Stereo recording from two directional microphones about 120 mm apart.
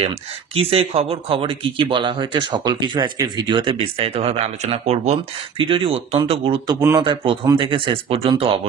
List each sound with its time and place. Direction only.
0.6 s speech: 55° right (ahead or behind)
5.6 s speech: 50° right (ahead or behind)